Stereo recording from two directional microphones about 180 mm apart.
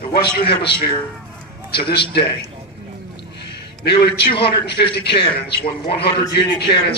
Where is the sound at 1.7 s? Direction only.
65° left (ahead or behind).